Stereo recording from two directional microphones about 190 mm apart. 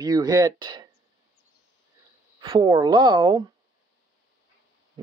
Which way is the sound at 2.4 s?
25° right (ahead or behind).